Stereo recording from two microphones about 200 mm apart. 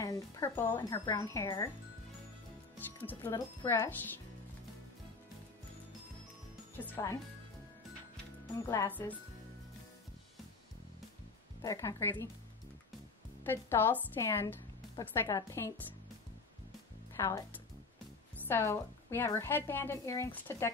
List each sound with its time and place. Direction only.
0.0 s a woman's voice: 15° left (ahead or behind)
3.1 s a woman's voice: 15° left (ahead or behind)
6.8 s a woman's voice: 15° left (ahead or behind)
8.6 s a woman's voice: 10° left (ahead or behind)
11.6 s a woman's voice: 15° left (ahead or behind)
13.5 s a woman's voice: 10° left (ahead or behind)
17.2 s a woman's voice: 15° left (ahead or behind)
18.5 s a woman's voice: 10° left (ahead or behind)